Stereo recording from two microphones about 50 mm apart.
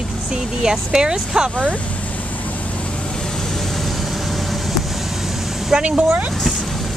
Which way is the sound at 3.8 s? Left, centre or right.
Centre.